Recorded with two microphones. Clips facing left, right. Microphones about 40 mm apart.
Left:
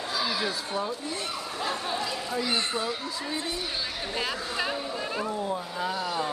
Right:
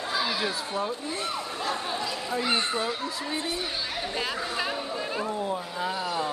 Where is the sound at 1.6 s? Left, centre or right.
Centre.